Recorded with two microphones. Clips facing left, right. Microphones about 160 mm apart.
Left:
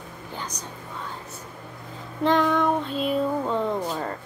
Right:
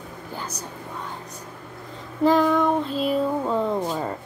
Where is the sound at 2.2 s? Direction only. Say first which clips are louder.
Right 3 dB; 5° right (ahead or behind).